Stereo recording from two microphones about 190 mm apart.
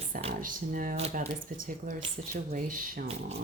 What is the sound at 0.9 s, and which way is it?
Speech, 35° right (ahead or behind).